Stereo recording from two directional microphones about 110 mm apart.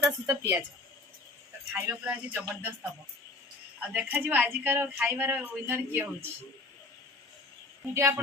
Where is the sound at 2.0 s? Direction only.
15° right (ahead or behind).